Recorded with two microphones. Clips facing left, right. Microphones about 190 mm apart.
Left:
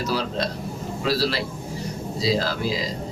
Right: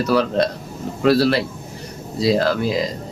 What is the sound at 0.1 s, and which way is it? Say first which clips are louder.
Speech: right 10 dB; 60° right (ahead or behind).